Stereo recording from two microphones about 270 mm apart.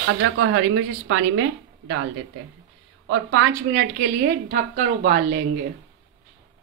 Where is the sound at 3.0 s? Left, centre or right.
Right.